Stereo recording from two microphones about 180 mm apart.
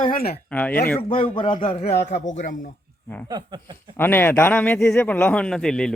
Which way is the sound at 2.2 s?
45° left (ahead or behind).